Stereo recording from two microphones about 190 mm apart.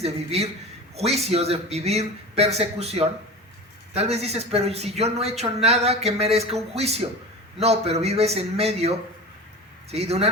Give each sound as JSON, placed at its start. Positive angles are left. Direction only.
{"t": 0.0, "sound": "speech", "side_deg": -35}